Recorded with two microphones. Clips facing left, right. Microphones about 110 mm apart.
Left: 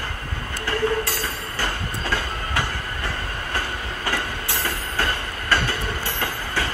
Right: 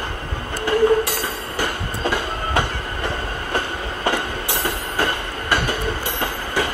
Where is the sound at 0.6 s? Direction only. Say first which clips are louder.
Right 7 dB; 15° right (ahead or behind).